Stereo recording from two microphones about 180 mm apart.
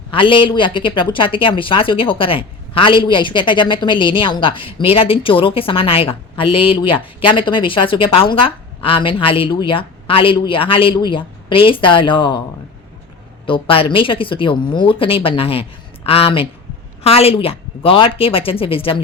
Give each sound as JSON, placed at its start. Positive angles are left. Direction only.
{"t": 0.1, "sound": "speech", "side_deg": 30}
{"t": 13.4, "sound": "speech", "side_deg": 30}